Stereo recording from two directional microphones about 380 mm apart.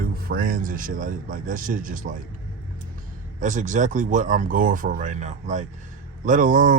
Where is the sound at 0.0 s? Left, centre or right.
Right.